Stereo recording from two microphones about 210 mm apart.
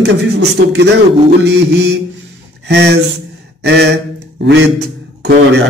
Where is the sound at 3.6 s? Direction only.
55° right (ahead or behind).